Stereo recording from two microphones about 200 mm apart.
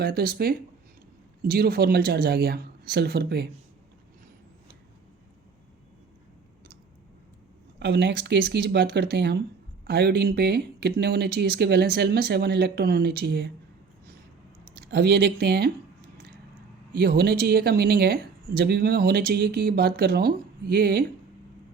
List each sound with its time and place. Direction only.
0.0 s speech: 50° right (ahead or behind)
7.8 s speech: 60° right (ahead or behind)
14.8 s speech: 55° right (ahead or behind)
16.9 s speech: 50° right (ahead or behind)